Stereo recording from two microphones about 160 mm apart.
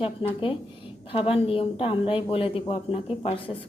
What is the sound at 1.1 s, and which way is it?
A woman's voice, 35° left (ahead or behind).